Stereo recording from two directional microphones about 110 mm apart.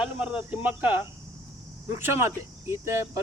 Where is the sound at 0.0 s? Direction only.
10° right (ahead or behind).